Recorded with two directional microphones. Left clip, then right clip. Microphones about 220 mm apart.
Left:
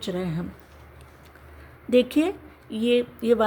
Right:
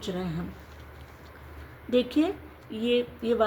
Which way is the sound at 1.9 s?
50° left (ahead or behind).